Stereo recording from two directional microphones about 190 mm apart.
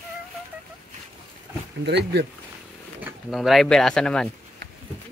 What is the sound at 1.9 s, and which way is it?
Speech, 60° right (ahead or behind).